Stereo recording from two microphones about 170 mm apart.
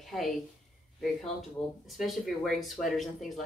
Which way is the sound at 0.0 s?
Centre (ahead or behind).